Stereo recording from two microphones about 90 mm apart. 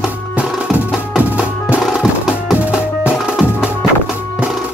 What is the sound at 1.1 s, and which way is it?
Music, 15° right (ahead or behind).